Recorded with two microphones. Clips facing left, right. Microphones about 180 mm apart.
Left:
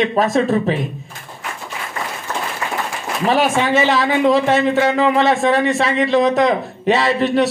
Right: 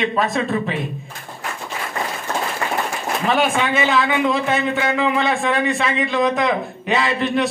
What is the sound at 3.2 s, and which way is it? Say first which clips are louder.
A man's voice: left 3 dB; 40° left (ahead or behind).